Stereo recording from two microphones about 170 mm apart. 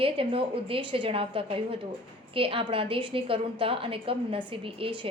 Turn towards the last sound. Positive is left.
turn(degrees=-30)  # may be behind; listen again after turning